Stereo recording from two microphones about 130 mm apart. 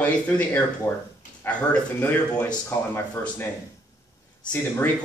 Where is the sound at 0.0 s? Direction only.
10° left (ahead or behind).